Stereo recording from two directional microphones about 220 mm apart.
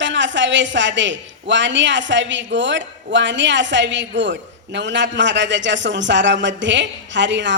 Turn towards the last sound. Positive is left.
turn(degrees=-55)  # may be behind; listen again after turning